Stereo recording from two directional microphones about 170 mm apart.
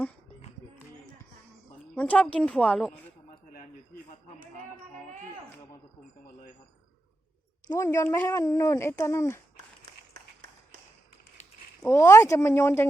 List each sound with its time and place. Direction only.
2.0 s speech: 5° left (ahead or behind)
3.2 s a sound: 50° left (ahead or behind)
7.7 s speech: 15° left (ahead or behind)
11.9 s speech: 15° left (ahead or behind)